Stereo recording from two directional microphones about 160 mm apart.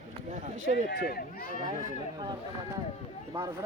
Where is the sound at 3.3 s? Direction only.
20° right (ahead or behind).